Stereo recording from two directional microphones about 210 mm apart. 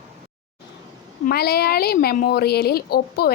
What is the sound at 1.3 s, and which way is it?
A woman's voice, 50° left (ahead or behind).